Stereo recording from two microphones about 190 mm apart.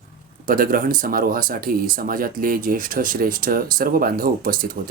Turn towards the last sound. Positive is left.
turn(degrees=-50)  # may be behind; listen again after turning